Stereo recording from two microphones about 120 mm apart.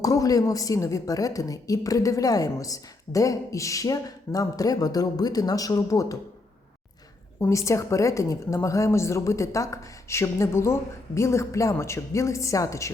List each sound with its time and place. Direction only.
0.0 s a woman's voice: 30° left (ahead or behind)
7.3 s a woman's voice: 25° left (ahead or behind)